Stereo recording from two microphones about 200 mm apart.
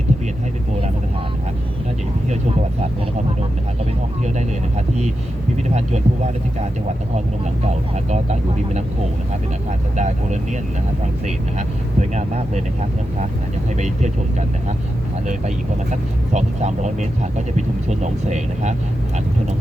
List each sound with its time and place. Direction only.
7.4 s speech: 35° right (ahead or behind)
10.0 s speech: 35° right (ahead or behind)
11.9 s speech: 35° right (ahead or behind)
13.7 s speech: 35° right (ahead or behind)